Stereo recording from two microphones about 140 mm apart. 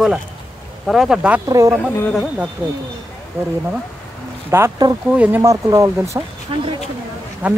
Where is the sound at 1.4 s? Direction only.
25° right (ahead or behind).